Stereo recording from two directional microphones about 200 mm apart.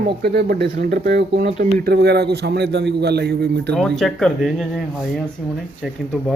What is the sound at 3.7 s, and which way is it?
Speech, centre (ahead or behind).